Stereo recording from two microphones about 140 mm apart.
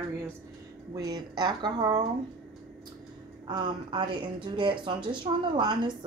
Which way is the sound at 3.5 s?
35° right (ahead or behind).